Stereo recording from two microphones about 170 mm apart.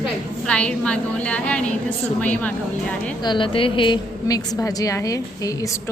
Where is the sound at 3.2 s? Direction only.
30° left (ahead or behind).